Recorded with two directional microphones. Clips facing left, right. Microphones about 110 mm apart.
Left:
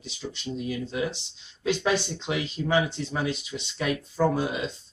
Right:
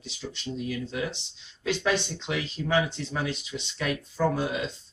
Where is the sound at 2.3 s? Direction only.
20° left (ahead or behind).